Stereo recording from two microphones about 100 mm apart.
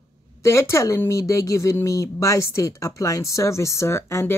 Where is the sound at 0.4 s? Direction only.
30° left (ahead or behind).